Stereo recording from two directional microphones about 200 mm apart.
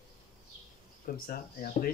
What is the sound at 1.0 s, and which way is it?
Speech, 45° left (ahead or behind).